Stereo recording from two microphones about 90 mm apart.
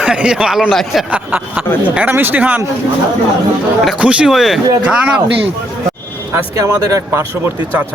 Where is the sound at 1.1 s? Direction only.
15° right (ahead or behind).